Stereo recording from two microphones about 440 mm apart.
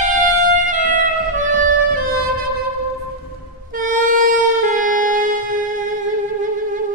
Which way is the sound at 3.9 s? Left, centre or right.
Centre.